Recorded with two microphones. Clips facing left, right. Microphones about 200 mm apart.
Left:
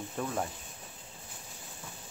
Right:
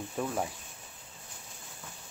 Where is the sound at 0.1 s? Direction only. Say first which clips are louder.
Right 1 dB; 5° right (ahead or behind).